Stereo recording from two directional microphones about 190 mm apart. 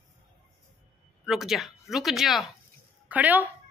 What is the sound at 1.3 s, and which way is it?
A woman's voice, centre (ahead or behind).